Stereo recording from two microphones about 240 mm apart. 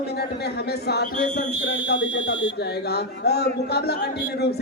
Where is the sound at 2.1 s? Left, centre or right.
Left.